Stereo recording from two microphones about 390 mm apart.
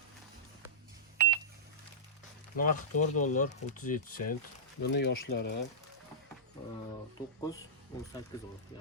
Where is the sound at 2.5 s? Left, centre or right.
Centre.